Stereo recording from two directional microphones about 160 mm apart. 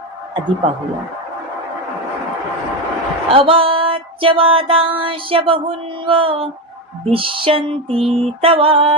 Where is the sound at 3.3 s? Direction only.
35° right (ahead or behind).